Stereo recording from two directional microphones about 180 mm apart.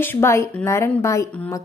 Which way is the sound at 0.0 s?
15° left (ahead or behind).